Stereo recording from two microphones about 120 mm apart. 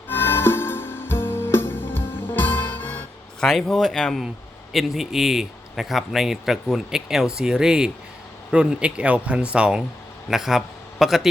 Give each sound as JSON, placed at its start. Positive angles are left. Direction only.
{"t": 0.1, "sound": "music", "side_deg": 20}
{"t": 3.4, "sound": "a man's voice", "side_deg": 5}